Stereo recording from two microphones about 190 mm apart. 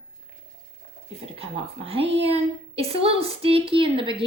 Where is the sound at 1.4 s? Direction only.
30° right (ahead or behind).